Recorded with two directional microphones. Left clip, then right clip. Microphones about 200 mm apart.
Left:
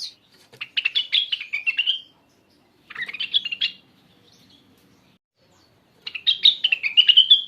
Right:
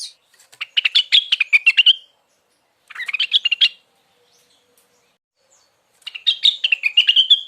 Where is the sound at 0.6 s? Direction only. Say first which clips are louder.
Right 6 dB; 25° right (ahead or behind).